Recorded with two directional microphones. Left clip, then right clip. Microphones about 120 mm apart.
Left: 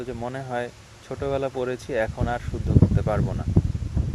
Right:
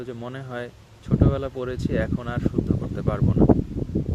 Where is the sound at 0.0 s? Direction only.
25° right (ahead or behind).